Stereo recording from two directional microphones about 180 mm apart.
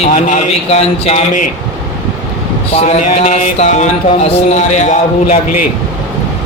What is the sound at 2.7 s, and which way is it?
Mantra, 40° left (ahead or behind).